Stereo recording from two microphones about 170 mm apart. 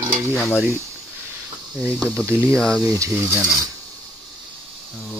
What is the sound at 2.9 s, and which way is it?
Mechanisms, 15° right (ahead or behind).